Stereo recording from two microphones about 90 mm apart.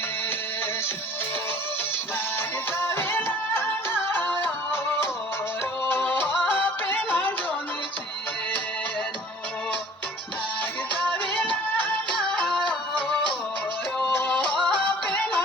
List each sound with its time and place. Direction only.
2.7 s music: 25° left (ahead or behind)
11.1 s music: 20° left (ahead or behind)
12.1 s music: 5° left (ahead or behind)
14.1 s music: 25° left (ahead or behind)